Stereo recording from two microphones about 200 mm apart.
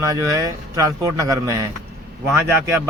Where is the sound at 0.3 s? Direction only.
15° right (ahead or behind).